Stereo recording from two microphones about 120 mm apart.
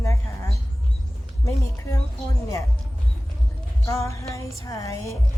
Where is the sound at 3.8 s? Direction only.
25° left (ahead or behind).